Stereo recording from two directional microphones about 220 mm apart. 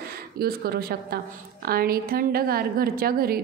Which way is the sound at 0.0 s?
45° right (ahead or behind).